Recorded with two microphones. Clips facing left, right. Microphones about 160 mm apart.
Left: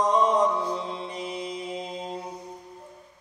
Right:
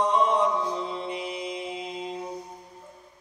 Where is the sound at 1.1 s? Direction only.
40° left (ahead or behind).